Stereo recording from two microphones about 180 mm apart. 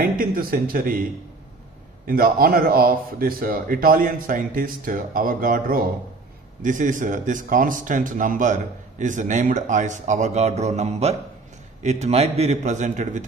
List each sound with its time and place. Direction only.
0.0 s speech: 55° right (ahead or behind)
2.0 s a man's voice: 50° right (ahead or behind)